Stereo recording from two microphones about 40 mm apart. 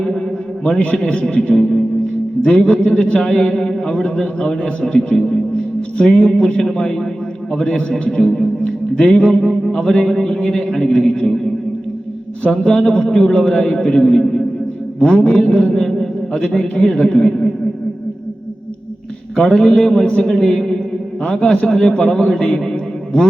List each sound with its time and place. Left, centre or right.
1.3 s a man's voice: left
8.4 s music: left
9.4 s a sound: centre
9.7 s a man's voice: left
10.8 s a man's voice: left
12.5 s a man's voice: left
14.9 s a man's voice: left
19.4 s a man's voice: left